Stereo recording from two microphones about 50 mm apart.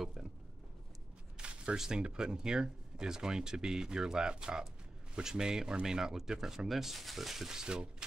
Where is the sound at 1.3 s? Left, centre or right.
Centre.